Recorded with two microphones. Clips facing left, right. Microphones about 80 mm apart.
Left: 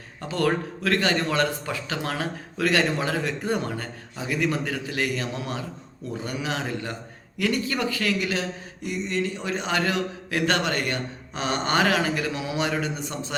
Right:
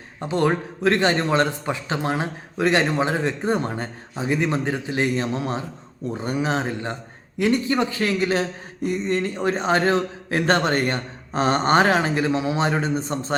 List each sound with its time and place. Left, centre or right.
0.2 s a man's voice: right